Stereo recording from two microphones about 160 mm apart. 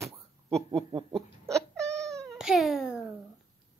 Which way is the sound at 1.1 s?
5° left (ahead or behind).